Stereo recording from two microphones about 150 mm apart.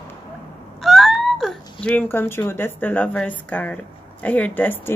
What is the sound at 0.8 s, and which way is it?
A woman's voice, centre (ahead or behind).